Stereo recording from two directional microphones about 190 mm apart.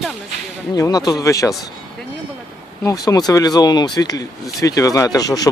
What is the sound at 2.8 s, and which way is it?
Speech, 20° left (ahead or behind).